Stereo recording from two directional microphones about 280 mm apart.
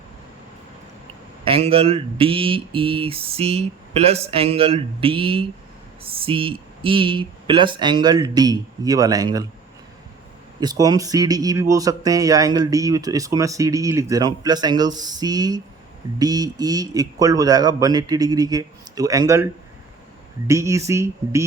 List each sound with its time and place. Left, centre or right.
1.5 s speech: centre
10.6 s speech: centre
20.5 s speech: centre